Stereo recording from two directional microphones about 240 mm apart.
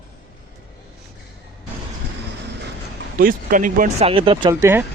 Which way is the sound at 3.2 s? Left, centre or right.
Right.